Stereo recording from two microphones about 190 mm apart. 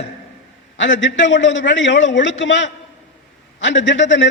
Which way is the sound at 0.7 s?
75° left (ahead or behind).